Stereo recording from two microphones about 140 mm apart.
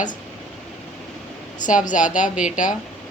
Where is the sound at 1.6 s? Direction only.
65° left (ahead or behind).